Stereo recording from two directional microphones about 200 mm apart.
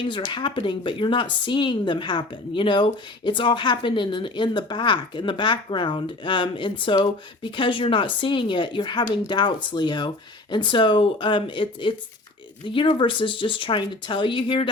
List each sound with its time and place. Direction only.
0.0 s speech: 25° left (ahead or behind)